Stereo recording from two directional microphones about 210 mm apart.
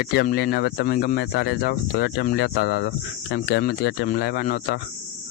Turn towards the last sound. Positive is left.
turn(degrees=40)  # may be behind; listen again after turning